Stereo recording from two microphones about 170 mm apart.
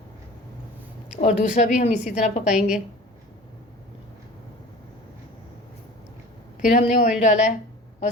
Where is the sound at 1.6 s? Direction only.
45° left (ahead or behind).